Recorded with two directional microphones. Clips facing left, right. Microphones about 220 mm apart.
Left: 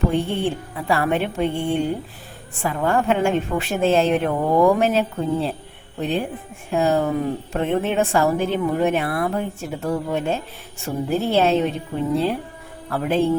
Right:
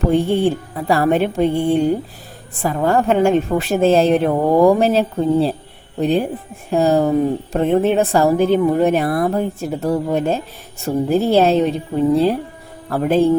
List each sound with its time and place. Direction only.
0.1 s speech: 40° right (ahead or behind)